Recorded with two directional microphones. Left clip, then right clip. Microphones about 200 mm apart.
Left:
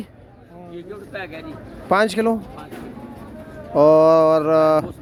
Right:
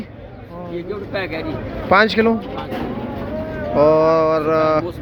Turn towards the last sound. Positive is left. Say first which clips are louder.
# left 1 dB
turn(degrees=35)  # may be behind; listen again after turning